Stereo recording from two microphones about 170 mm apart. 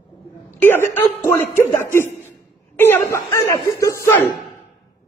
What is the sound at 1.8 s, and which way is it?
Speech, 15° left (ahead or behind).